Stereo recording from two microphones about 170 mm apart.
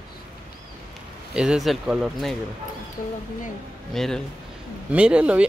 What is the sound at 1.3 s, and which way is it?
Speech, 5° right (ahead or behind).